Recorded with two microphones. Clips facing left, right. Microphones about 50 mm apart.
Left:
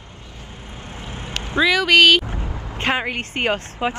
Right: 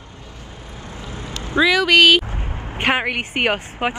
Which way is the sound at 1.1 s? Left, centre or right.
Left.